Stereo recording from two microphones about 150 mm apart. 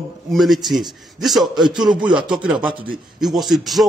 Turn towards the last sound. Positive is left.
turn(degrees=0)  # may be behind; listen again after turning